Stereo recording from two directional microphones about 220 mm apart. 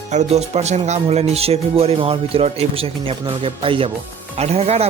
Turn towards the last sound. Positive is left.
turn(degrees=-30)  # may be behind; listen again after turning